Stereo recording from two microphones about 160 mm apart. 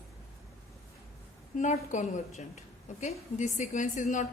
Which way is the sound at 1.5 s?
50° left (ahead or behind).